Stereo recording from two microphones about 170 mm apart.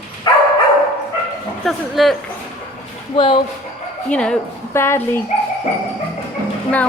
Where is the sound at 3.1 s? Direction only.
30° left (ahead or behind).